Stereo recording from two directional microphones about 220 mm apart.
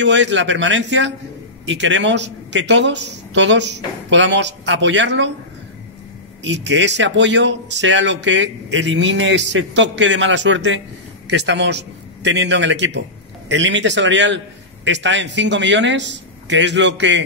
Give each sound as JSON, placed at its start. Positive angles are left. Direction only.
{"t": 0.0, "sound": "speech", "side_deg": -55}
{"t": 6.4, "sound": "a man's voice", "side_deg": -55}